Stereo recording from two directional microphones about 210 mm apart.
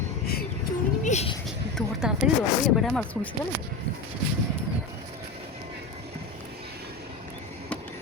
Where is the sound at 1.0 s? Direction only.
30° left (ahead or behind).